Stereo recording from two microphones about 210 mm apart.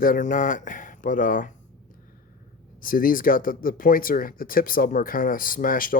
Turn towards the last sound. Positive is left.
turn(degrees=40)  # may be behind; listen again after turning